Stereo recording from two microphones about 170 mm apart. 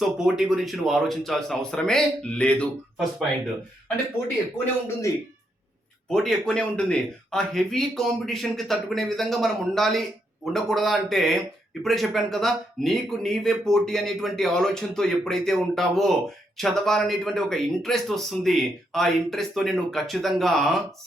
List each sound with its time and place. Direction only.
0.0 s speech: 5° right (ahead or behind)
4.5 s speech: 20° left (ahead or behind)
6.1 s speech: 5° left (ahead or behind)